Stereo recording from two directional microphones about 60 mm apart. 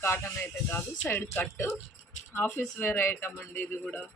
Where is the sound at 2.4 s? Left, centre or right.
Left.